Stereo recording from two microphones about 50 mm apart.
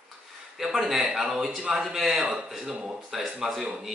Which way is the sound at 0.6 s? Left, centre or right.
Centre.